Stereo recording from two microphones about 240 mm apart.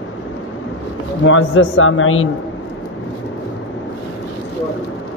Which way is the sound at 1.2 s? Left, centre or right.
Left.